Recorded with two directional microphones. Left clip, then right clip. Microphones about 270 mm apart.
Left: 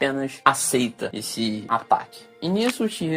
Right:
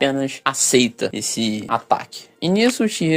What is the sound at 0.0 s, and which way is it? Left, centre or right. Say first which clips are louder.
Speech: right 1 dB; right.